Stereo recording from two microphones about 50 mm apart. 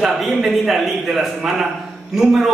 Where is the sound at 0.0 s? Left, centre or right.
Centre.